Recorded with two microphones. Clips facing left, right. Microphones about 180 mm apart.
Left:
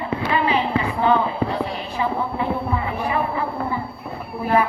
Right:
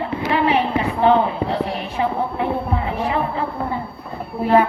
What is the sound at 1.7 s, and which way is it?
A woman's voice, 65° right (ahead or behind).